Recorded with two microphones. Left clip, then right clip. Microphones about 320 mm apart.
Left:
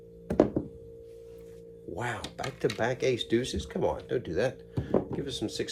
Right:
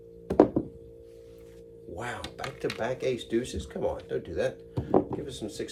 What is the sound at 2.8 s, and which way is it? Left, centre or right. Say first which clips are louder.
Speech: left 1 dB; left.